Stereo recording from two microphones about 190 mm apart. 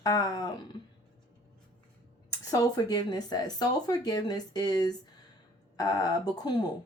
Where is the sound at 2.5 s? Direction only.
20° left (ahead or behind).